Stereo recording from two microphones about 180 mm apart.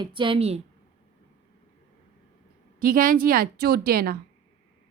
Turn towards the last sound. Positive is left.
turn(degrees=-55)  # may be behind; listen again after turning